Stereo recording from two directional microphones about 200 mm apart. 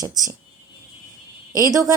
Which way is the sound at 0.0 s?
20° right (ahead or behind).